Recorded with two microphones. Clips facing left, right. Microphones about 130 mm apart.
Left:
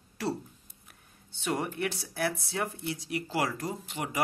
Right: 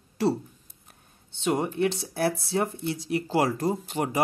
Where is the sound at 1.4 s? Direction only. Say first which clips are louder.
Right 6 dB; 25° right (ahead or behind).